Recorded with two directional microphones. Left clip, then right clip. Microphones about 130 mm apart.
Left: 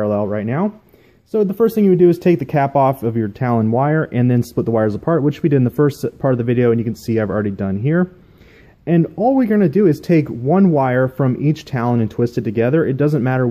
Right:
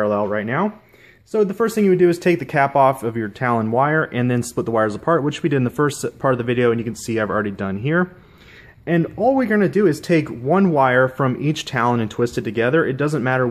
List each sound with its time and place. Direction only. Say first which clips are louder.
0.0 s speech: even; 40° left (ahead or behind)
8.8 s speech: left 2 dB; 45° left (ahead or behind)
10.5 s speech: even; 35° left (ahead or behind)